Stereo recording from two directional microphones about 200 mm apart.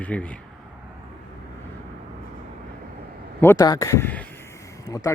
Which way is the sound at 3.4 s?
15° left (ahead or behind).